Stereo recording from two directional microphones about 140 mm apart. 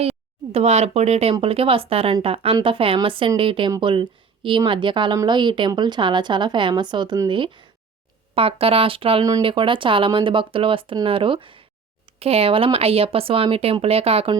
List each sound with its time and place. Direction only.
0.0 s a woman's voice: 45° right (ahead or behind)